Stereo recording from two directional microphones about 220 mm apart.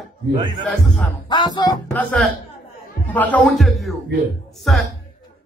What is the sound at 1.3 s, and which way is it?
Music, 20° left (ahead or behind).